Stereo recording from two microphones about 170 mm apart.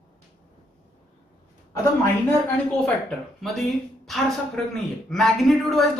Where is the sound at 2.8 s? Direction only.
Centre (ahead or behind).